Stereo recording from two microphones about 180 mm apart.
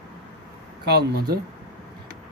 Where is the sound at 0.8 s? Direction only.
65° right (ahead or behind).